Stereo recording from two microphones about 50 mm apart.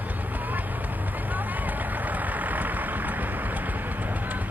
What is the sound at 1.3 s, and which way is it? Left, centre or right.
Vehicle, right.